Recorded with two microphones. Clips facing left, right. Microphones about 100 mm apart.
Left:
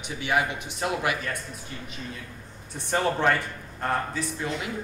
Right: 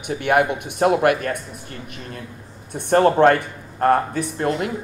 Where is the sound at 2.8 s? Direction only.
55° right (ahead or behind).